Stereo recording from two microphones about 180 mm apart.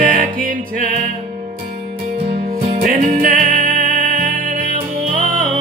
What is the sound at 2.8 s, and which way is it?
Music, 50° right (ahead or behind).